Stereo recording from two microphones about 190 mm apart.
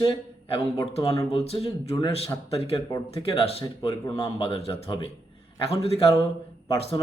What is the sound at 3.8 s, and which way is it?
Speech, 15° left (ahead or behind).